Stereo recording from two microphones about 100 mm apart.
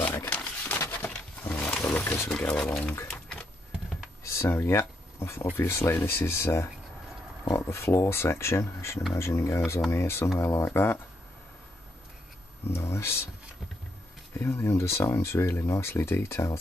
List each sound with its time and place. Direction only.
0.0 s a sound: 20° left (ahead or behind)
0.8 s roaring cats: 20° left (ahead or behind)
1.8 s wild animals: 20° left (ahead or behind)
2.3 s speech: 10° left (ahead or behind)
3.1 s a sound: 5° left (ahead or behind)
4.2 s speech: 25° left (ahead or behind)
12.6 s speech: 25° left (ahead or behind)
14.4 s speech: 25° left (ahead or behind)